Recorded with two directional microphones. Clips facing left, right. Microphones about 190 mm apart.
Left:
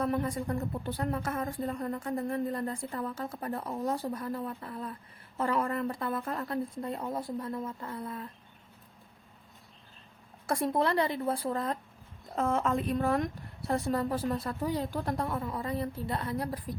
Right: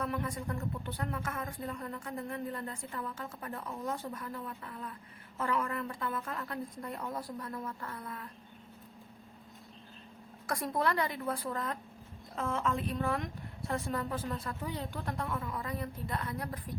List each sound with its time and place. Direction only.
0.0 s a woman's voice: 35° left (ahead or behind)
10.4 s a woman's voice: 30° left (ahead or behind)
12.4 s speech: 45° left (ahead or behind)